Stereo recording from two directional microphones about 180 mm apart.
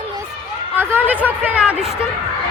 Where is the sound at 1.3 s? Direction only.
10° right (ahead or behind).